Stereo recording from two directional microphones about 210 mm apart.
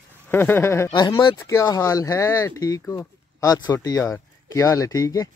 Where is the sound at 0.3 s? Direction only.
10° left (ahead or behind).